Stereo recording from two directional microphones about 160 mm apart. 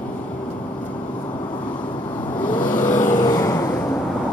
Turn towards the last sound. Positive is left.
turn(degrees=25)  # may be behind; listen again after turning